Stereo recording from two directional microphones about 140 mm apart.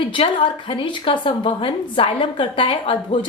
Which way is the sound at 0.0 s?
40° left (ahead or behind).